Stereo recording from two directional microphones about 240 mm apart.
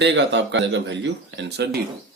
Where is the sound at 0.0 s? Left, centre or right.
Right.